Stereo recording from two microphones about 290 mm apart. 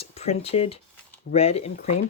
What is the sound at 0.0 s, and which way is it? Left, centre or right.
Speech, left.